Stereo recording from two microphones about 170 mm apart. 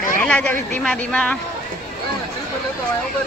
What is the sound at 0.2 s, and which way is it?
Speech, 5° left (ahead or behind).